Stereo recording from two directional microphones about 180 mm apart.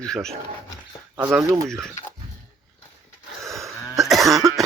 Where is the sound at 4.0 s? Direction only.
Centre (ahead or behind).